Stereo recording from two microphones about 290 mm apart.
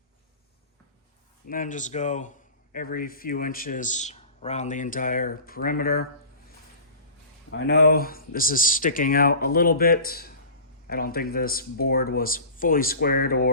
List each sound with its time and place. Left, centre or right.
1.5 s speech: left
7.5 s speech: left